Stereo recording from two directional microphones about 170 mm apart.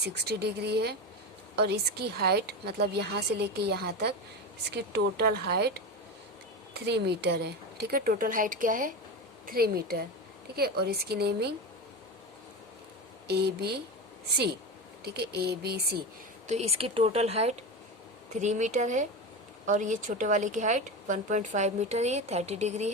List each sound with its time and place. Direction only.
0.0 s a woman's voice: 75° right (ahead or behind)
6.8 s a woman's voice: 75° right (ahead or behind); by 9.0 s 50° right (ahead or behind)
9.5 s a woman's voice: 65° right (ahead or behind)
13.2 s a woman's voice: 70° right (ahead or behind)
15.0 s a woman's voice: 70° right (ahead or behind)
16.5 s a woman's voice: 40° right (ahead or behind)